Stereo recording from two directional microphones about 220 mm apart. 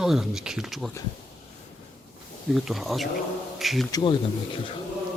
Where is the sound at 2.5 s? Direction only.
Centre (ahead or behind).